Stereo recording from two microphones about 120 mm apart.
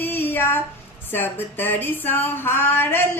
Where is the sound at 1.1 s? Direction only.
15° left (ahead or behind).